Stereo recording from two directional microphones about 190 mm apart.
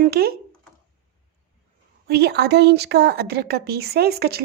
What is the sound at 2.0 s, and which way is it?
Speech, 55° right (ahead or behind).